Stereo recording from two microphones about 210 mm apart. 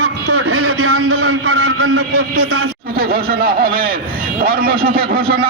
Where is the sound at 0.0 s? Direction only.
90° right.